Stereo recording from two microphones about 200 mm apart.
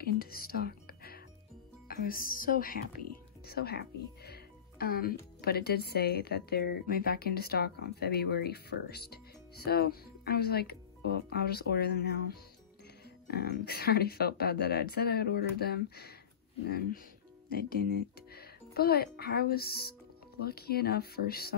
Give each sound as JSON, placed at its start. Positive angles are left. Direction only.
{"t": 0.0, "sound": "music", "side_deg": 50}
{"t": 1.9, "sound": "a woman's voice", "side_deg": 45}